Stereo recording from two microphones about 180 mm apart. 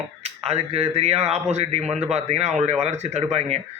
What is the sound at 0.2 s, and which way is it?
A man's voice, 35° right (ahead or behind).